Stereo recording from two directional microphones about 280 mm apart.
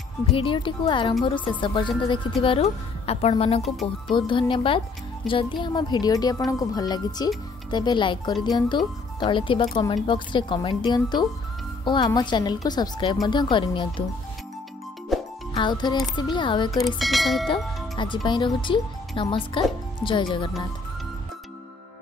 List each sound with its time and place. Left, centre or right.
0.4 s speech: centre
15.1 s music: centre
15.5 s speech: centre
16.8 s speech: centre
17.9 s speech: centre